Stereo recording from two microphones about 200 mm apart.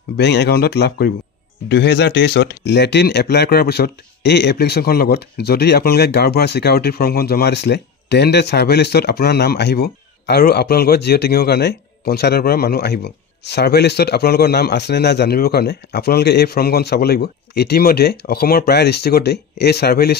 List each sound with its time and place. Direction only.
0.2 s speech: 55° left (ahead or behind)